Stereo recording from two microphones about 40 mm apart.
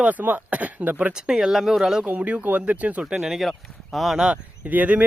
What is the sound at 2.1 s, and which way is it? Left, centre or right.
Speech, right.